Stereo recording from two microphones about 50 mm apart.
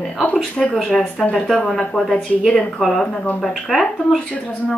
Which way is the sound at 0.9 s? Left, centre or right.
Centre.